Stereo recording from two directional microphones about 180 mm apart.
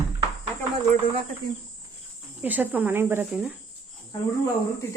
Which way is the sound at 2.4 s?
10° right (ahead or behind).